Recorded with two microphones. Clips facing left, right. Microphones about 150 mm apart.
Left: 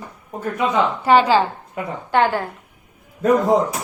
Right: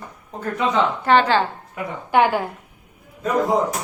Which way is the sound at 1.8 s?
25° left (ahead or behind).